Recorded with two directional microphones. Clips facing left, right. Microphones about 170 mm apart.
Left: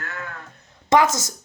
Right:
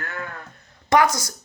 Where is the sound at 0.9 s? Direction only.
25° left (ahead or behind).